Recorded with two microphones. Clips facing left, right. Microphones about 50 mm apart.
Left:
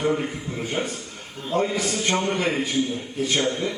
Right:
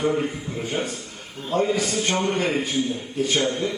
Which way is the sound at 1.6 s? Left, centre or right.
Left.